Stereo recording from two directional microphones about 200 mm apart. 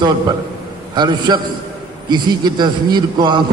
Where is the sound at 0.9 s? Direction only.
20° right (ahead or behind).